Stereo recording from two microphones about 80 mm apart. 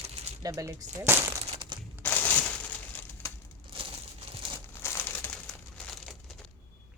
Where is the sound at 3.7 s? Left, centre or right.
Right.